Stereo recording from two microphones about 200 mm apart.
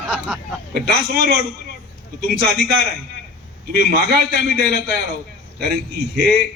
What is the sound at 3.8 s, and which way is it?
Speech, 55° right (ahead or behind).